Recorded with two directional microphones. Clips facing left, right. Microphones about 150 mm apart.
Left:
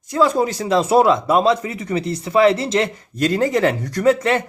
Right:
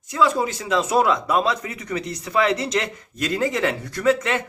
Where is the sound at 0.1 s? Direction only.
40° left (ahead or behind).